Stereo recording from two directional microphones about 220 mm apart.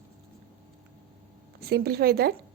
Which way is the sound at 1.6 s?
45° right (ahead or behind).